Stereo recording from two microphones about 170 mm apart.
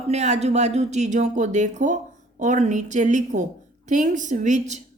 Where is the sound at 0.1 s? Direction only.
40° right (ahead or behind).